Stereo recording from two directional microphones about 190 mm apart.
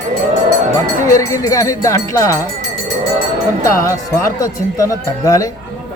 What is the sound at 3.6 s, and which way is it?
Speech, 15° left (ahead or behind).